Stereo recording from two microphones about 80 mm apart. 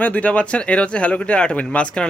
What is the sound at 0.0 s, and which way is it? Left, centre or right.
Speech, centre.